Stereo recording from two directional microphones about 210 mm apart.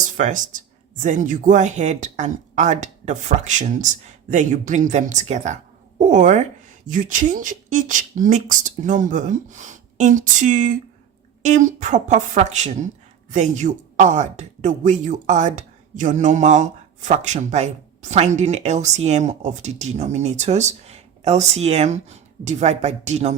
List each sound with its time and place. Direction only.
0.0 s speech: 35° right (ahead or behind)